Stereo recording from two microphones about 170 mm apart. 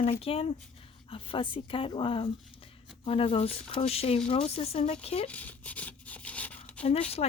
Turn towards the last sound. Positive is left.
turn(degrees=35)  # may be behind; listen again after turning